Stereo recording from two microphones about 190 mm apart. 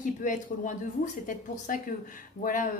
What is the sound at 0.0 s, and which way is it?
A woman's voice, 45° left (ahead or behind).